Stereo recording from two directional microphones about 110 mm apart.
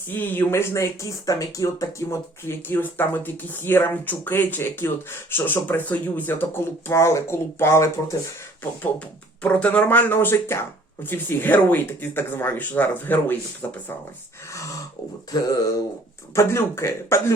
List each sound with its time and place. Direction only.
0.1 s speech: 15° left (ahead or behind)
8.8 s speech: 15° left (ahead or behind)
15.3 s mantra: 35° left (ahead or behind)
16.3 s speech: 25° left (ahead or behind)